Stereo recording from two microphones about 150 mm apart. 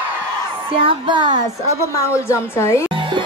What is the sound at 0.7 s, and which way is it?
Speech, 35° right (ahead or behind).